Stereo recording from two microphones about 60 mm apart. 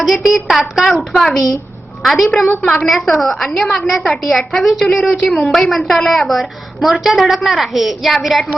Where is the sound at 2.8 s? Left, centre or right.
Centre.